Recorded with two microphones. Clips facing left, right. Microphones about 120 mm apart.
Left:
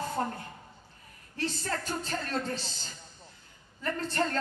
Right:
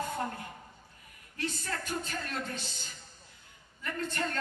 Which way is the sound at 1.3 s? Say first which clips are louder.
Left 3 dB; 30° left (ahead or behind).